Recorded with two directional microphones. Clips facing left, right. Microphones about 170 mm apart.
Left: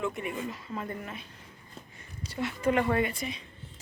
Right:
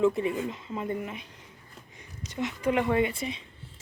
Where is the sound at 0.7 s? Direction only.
15° right (ahead or behind).